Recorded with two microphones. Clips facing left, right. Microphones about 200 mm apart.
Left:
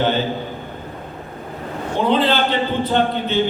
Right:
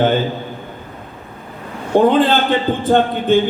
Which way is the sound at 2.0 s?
50° right (ahead or behind).